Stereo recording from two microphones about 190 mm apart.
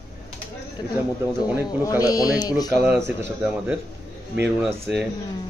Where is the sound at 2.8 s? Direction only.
10° right (ahead or behind).